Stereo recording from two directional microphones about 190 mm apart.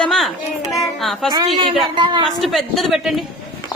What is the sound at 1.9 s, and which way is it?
Speech, 25° right (ahead or behind).